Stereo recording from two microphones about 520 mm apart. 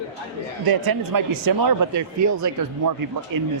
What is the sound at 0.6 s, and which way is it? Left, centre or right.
Speech, right.